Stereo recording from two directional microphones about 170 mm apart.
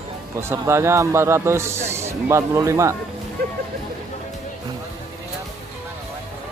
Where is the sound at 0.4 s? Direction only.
15° right (ahead or behind).